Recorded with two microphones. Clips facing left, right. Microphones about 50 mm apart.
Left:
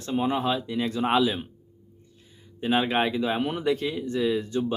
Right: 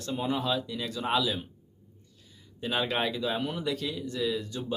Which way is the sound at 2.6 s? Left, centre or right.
Left.